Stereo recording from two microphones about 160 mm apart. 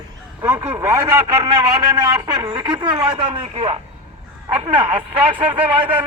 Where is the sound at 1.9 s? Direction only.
25° right (ahead or behind).